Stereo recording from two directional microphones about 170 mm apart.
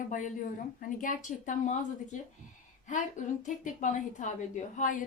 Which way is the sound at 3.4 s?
45° left (ahead or behind).